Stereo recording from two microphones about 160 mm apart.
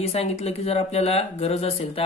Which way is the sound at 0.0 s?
40° left (ahead or behind).